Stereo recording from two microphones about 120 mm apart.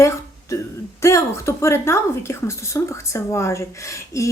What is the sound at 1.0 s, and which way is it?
Speech, 25° left (ahead or behind).